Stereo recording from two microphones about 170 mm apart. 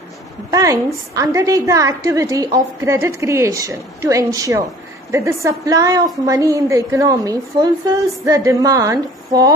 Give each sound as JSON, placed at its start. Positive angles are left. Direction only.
{"t": 0.5, "sound": "a woman's voice", "side_deg": -20}